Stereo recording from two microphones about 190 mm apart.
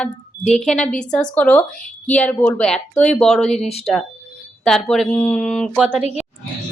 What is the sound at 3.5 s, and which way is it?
Speech, 35° left (ahead or behind).